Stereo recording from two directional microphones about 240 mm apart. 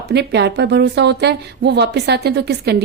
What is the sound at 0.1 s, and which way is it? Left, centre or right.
A woman's voice, right.